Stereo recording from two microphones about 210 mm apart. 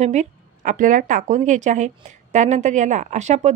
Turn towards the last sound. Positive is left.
turn(degrees=-35)  # may be behind; listen again after turning